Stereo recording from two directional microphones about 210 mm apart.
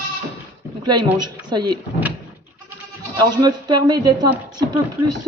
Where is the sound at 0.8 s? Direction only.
20° right (ahead or behind).